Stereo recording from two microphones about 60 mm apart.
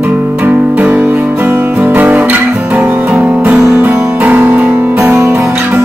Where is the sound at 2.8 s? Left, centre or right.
Right.